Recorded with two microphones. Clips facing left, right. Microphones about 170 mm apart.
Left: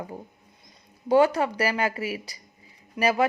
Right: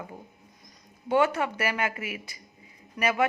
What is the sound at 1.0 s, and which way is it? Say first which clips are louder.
A woman's voice: left 4 dB; 35° left (ahead or behind).